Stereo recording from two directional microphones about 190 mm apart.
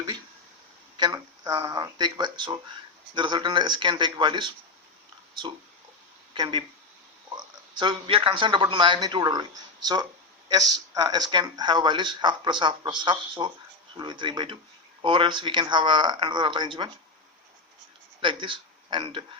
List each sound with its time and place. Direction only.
0.9 s speech: 20° right (ahead or behind)
6.3 s speech: 25° right (ahead or behind)
18.2 s speech: 25° right (ahead or behind)